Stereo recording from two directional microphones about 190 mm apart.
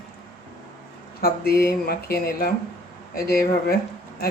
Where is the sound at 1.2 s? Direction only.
55° left (ahead or behind).